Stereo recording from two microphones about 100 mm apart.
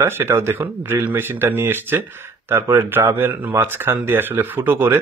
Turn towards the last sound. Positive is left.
turn(degrees=-20)  # may be behind; listen again after turning